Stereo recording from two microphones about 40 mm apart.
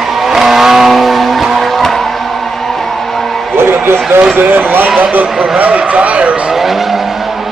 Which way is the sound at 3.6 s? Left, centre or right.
Right.